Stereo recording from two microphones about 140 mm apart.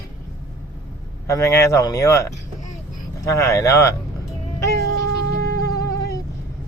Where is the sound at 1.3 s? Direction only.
20° left (ahead or behind).